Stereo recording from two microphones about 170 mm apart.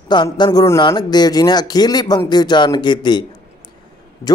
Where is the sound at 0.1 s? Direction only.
25° left (ahead or behind).